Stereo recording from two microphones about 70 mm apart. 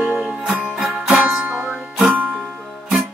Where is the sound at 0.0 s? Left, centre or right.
Centre.